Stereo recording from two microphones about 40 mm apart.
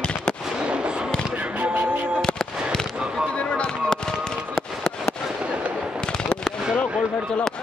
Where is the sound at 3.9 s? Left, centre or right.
Centre.